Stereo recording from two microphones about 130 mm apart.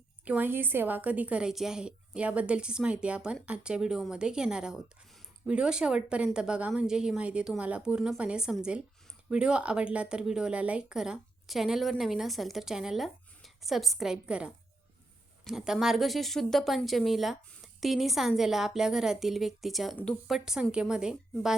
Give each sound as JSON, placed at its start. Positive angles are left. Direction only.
{"t": 0.3, "sound": "a woman's voice", "side_deg": -15}